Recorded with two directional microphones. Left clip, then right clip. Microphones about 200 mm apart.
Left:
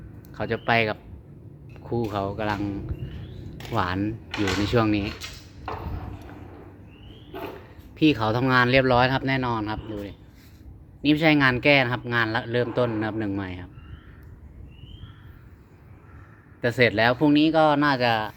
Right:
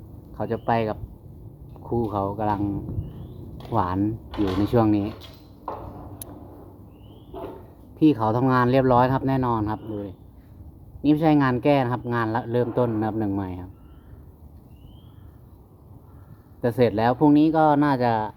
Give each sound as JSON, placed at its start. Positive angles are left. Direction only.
{"t": 0.3, "sound": "speech", "side_deg": -10}
{"t": 1.8, "sound": "speech", "side_deg": 10}
{"t": 3.8, "sound": "speech", "side_deg": -10}
{"t": 7.9, "sound": "speech", "side_deg": -10}
{"t": 16.6, "sound": "speech", "side_deg": -15}